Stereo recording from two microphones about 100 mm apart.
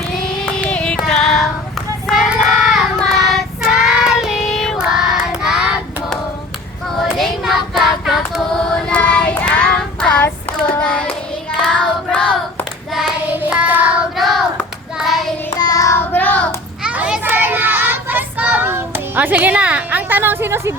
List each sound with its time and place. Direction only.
0.4 s child singing: 10° left (ahead or behind)
7.2 s female singing: centre (ahead or behind)
10.6 s child singing: 10° left (ahead or behind)
12.9 s child singing: centre (ahead or behind)
13.4 s child singing: 15° right (ahead or behind)
14.2 s child singing: centre (ahead or behind)
15.5 s child singing: 40° left (ahead or behind)
16.0 s child singing: 15° left (ahead or behind)
16.8 s child singing: 10° right (ahead or behind)